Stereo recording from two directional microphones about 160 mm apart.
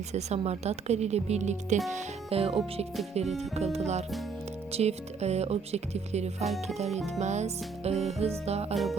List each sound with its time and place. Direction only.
0.1 s speech: 45° right (ahead or behind)
6.4 s speech: centre (ahead or behind)
6.7 s speech: 45° right (ahead or behind)
8.7 s speech: centre (ahead or behind)